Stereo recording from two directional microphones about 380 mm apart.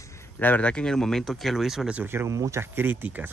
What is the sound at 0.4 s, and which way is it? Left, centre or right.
Speech, centre.